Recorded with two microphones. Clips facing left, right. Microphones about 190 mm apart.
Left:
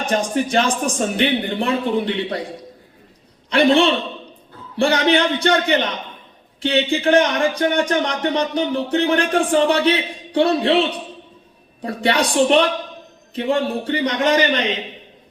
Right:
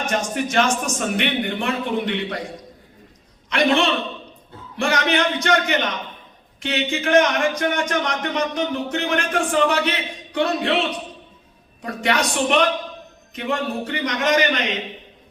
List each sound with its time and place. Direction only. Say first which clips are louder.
0.0 s speech: left 3 dB; 30° left (ahead or behind)
3.5 s speech: left 4 dB; 30° left (ahead or behind)